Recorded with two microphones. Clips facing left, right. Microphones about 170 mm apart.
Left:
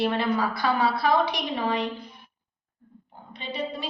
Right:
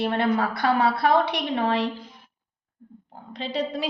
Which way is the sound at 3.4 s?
90° right.